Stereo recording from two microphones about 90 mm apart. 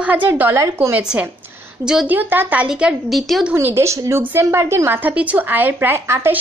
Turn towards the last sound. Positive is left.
turn(degrees=-25)  # may be behind; listen again after turning